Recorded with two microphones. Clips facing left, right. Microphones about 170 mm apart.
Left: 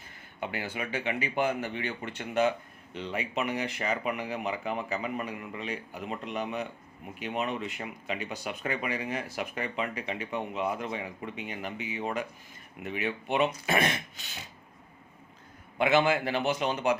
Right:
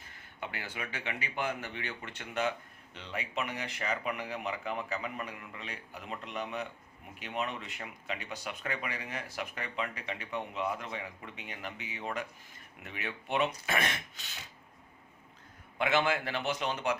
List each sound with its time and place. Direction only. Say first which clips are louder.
0.3 s speech: left 6 dB; 15° left (ahead or behind)
15.8 s speech: left 5 dB; 10° left (ahead or behind)